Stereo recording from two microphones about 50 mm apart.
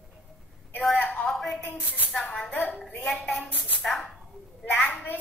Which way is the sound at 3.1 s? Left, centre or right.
Centre.